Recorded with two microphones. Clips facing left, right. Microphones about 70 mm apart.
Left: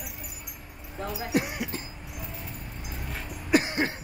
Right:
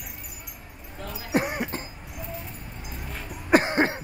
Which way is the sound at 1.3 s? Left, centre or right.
Right.